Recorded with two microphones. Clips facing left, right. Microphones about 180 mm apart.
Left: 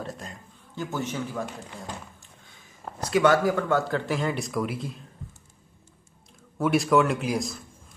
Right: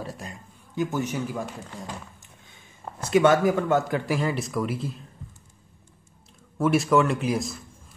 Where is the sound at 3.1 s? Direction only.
20° right (ahead or behind); by 5.0 s centre (ahead or behind).